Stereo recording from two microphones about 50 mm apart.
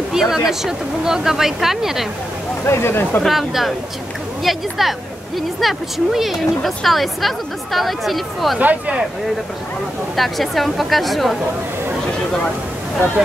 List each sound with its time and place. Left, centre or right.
0.1 s speech: centre
2.6 s speech: left
3.3 s a woman's voice: centre
8.5 s speech: right
10.1 s a woman's voice: centre